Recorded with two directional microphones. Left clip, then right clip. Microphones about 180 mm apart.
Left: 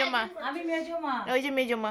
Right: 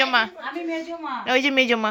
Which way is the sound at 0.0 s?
20° right (ahead or behind).